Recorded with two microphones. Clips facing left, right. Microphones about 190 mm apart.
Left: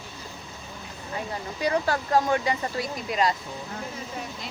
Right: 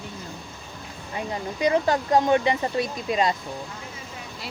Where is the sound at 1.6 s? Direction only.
20° right (ahead or behind).